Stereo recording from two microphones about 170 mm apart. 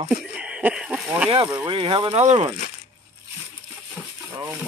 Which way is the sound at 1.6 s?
30° right (ahead or behind).